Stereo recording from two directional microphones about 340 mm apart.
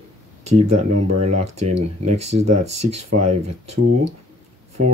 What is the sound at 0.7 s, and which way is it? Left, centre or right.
Speech, right.